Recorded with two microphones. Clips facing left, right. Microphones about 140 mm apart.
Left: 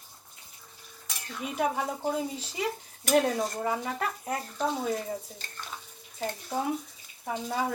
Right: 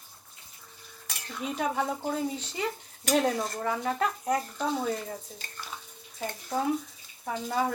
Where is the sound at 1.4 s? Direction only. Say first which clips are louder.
Even; 5° left (ahead or behind).